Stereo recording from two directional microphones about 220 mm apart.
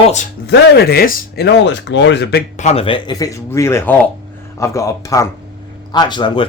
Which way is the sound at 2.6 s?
30° left (ahead or behind).